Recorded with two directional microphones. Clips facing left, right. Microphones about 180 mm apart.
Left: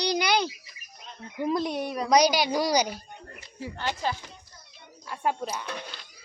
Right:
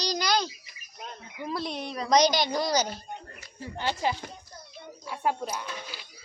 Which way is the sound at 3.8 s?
15° right (ahead or behind).